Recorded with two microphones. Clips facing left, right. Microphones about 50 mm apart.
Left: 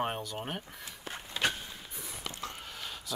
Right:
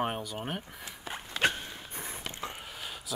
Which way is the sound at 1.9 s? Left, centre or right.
Right.